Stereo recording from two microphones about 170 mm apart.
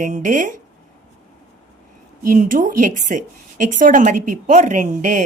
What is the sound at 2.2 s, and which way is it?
Speech, 50° right (ahead or behind).